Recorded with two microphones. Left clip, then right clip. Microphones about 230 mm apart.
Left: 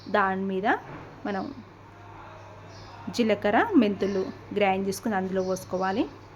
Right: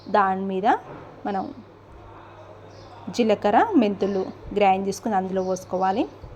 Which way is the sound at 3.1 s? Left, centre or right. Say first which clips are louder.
Right 4 dB; centre.